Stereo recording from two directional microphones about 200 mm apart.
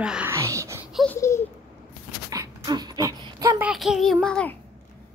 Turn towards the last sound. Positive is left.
turn(degrees=5)  # may be behind; listen again after turning